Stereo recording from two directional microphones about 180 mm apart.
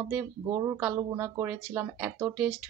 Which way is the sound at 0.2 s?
15° right (ahead or behind).